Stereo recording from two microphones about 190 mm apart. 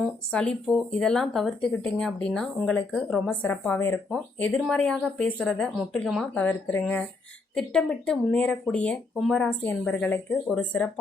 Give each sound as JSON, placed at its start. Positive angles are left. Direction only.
{"t": 0.0, "sound": "speech", "side_deg": 5}